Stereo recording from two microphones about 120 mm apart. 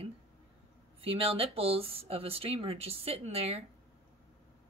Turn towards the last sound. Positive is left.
turn(degrees=-55)  # may be behind; listen again after turning